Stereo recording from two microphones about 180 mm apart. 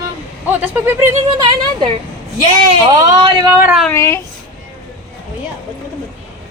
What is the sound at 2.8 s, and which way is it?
Speech, 20° right (ahead or behind).